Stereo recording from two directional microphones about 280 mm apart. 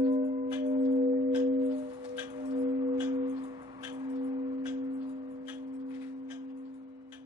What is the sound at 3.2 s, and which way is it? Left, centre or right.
Music, centre.